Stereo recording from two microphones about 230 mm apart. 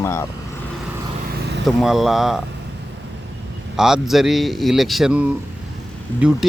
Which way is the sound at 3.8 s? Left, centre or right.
Centre.